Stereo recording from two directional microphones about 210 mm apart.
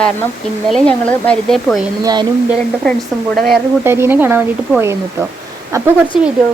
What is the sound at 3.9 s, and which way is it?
Speech, 10° right (ahead or behind).